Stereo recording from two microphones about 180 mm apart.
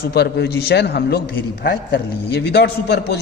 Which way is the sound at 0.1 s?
65° left (ahead or behind).